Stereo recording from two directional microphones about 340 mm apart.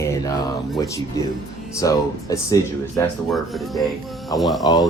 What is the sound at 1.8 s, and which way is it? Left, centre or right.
Speech, centre.